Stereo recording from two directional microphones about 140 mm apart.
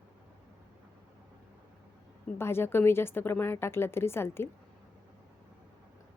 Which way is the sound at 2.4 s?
15° left (ahead or behind).